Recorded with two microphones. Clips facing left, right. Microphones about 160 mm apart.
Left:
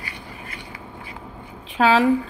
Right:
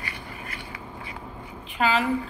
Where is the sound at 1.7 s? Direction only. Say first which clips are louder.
Left 6 dB; 90° left.